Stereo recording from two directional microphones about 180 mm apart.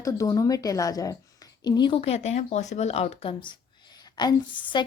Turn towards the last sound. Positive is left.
turn(degrees=25)  # may be behind; listen again after turning